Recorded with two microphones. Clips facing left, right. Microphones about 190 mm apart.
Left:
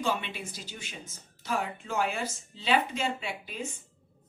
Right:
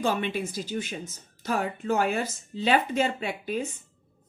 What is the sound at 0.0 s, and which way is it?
Speech, 45° right (ahead or behind).